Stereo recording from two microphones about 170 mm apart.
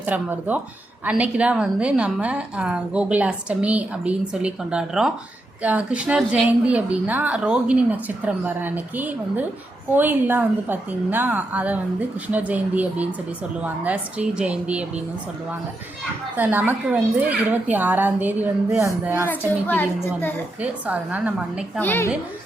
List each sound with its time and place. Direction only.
0.0 s a woman's voice: 10° right (ahead or behind)
16.3 s a woman's voice: 10° right (ahead or behind)
19.6 s a woman's voice: 10° left (ahead or behind)
20.6 s a woman's voice: 10° right (ahead or behind)
21.8 s a woman's voice: 10° left (ahead or behind)